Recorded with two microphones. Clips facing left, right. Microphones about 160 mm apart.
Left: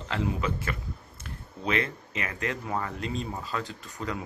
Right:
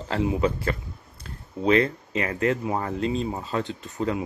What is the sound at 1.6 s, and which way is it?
Speech, 30° right (ahead or behind).